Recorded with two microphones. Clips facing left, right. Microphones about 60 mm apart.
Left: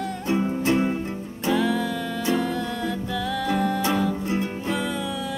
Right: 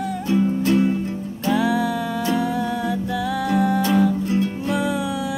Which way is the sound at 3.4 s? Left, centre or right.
Centre.